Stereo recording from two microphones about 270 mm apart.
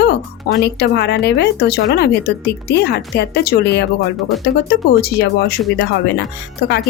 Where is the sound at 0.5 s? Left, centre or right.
Left.